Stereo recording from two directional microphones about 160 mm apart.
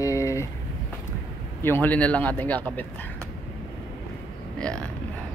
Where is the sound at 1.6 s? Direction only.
10° left (ahead or behind).